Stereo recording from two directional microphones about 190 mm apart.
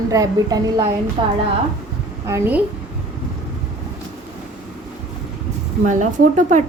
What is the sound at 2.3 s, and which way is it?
Speech, 10° right (ahead or behind).